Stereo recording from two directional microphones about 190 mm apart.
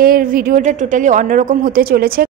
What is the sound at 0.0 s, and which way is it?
A woman's voice, 50° right (ahead or behind).